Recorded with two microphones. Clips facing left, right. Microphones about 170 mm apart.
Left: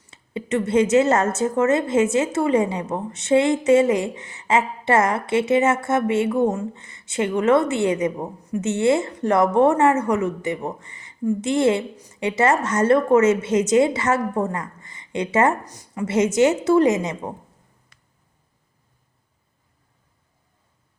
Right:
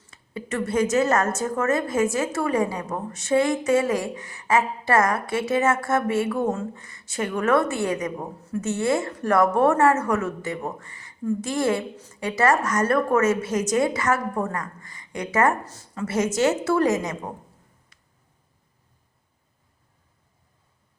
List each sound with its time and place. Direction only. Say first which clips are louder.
0.1 s a woman's voice: left 6 dB; 20° left (ahead or behind)